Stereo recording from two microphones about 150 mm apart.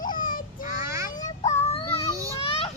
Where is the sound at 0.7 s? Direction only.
20° right (ahead or behind).